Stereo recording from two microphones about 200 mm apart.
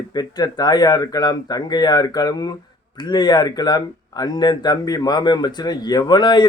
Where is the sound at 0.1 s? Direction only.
20° left (ahead or behind).